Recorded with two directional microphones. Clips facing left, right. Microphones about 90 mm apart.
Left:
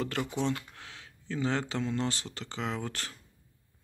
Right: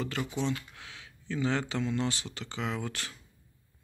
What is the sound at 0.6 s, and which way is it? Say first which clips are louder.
Speech: left 1 dB; 35° left (ahead or behind).